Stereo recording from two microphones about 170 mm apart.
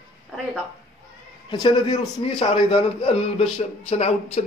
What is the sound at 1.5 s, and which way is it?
A man's voice, 25° left (ahead or behind).